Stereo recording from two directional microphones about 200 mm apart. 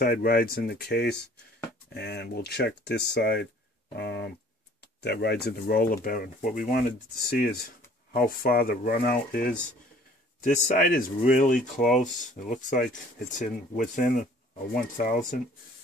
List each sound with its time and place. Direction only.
0.0 s speech: 50° left (ahead or behind)